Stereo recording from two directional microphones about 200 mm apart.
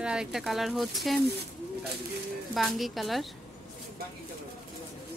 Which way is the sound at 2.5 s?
Centre (ahead or behind).